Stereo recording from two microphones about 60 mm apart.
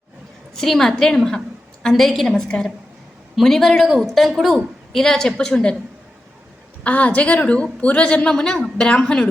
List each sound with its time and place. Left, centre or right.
0.5 s a woman's voice: centre
6.8 s a woman's voice: left